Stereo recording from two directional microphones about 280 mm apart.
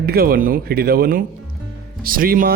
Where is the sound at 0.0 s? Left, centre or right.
Right.